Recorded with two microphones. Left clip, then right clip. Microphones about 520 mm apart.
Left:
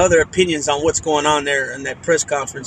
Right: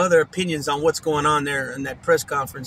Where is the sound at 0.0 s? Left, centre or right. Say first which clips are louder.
Left 4 dB; right.